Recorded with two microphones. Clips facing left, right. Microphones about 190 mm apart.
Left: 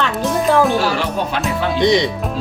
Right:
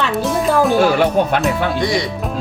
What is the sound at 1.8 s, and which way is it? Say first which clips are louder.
Speech: left 8 dB; 20° left (ahead or behind).